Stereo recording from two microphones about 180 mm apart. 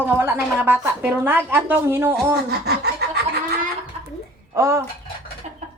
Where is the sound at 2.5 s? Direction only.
65° right (ahead or behind).